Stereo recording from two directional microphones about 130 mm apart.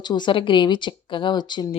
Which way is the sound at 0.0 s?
35° left (ahead or behind).